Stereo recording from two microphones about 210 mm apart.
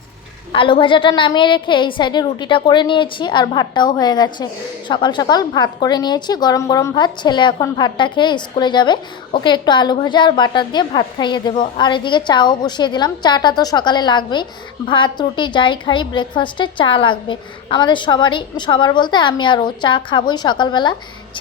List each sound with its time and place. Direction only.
0.5 s a woman's voice: 25° left (ahead or behind)